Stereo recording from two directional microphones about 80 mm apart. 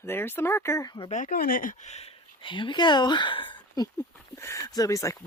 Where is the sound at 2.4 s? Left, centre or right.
Left.